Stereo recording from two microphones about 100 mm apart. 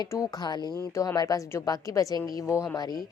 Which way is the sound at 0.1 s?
35° left (ahead or behind).